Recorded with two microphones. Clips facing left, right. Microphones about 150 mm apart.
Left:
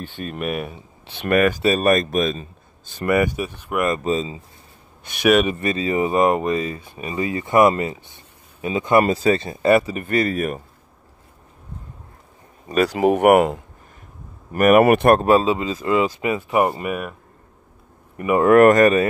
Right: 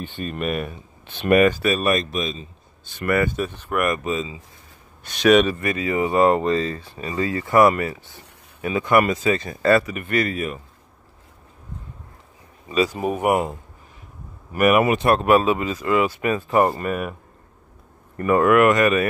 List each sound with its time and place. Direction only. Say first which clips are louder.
0.2 s speech: even; 5° left (ahead or behind)
1.6 s speech: left 3 dB; 40° left (ahead or behind)
3.1 s speech: left 2 dB; 15° left (ahead or behind)
3.8 s speech: left 3 dB; 30° left (ahead or behind)
5.0 s speech: even; 15° left (ahead or behind)
5.5 s speech: left 2 dB; 25° left (ahead or behind)
9.9 s speech: left 2 dB; 35° left (ahead or behind)
12.8 s speech: left 7 dB; 85° left
14.5 s speech: left 4 dB; 45° left (ahead or behind)
15.2 s speech: left 1 dB; 25° left (ahead or behind)
18.1 s speech: even; 15° left (ahead or behind)
18.4 s speech: left 5 dB; 40° left (ahead or behind)